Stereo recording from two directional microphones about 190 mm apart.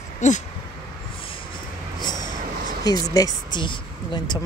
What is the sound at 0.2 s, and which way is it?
Speech, 40° left (ahead or behind).